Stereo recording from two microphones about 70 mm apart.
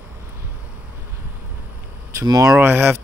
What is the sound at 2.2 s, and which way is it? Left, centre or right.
Speech, right.